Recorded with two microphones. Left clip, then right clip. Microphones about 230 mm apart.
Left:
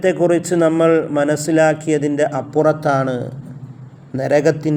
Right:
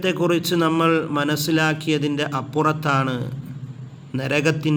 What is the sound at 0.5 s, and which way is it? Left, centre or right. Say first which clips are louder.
A man's voice: left 5 dB; right.